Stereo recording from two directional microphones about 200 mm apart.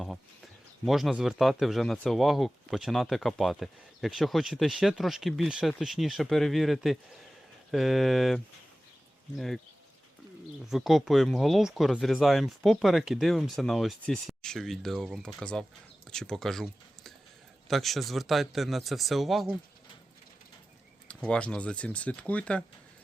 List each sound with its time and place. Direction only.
0.9 s speech: centre (ahead or behind)
10.7 s speech: centre (ahead or behind)
21.2 s speech: 5° left (ahead or behind)